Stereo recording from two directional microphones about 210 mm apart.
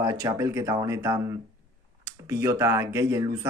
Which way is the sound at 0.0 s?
15° right (ahead or behind).